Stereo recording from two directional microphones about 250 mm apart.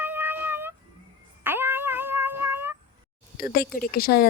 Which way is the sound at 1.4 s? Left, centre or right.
Centre.